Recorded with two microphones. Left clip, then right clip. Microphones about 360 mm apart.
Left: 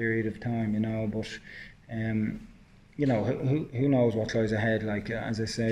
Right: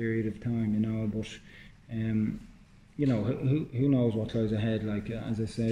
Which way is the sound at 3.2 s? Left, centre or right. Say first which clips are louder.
Left 2 dB; centre.